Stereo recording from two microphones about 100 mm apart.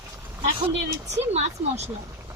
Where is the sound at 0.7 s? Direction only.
90° right.